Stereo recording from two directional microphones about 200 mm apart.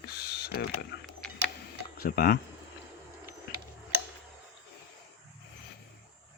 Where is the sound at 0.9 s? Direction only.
60° left (ahead or behind).